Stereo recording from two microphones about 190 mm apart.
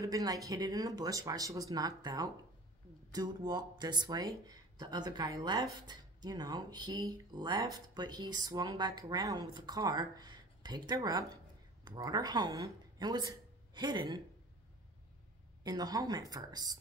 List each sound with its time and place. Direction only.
0.0 s speech: 20° right (ahead or behind)
15.6 s speech: 20° right (ahead or behind)